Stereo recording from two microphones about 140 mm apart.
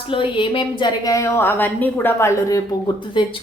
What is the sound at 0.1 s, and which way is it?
A woman's voice, 40° left (ahead or behind).